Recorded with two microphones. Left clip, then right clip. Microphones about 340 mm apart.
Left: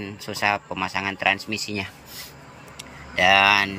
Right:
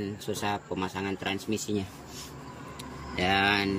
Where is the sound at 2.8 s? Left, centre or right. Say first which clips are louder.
Left 10 dB; centre.